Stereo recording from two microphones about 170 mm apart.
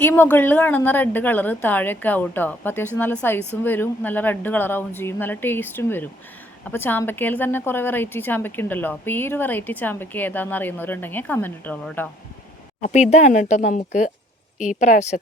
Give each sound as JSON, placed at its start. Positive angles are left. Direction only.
{"t": 0.0, "sound": "a woman's voice", "side_deg": 10}
{"t": 12.8, "sound": "speech", "side_deg": 40}